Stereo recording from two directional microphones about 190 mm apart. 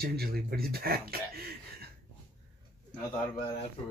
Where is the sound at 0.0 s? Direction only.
55° right (ahead or behind).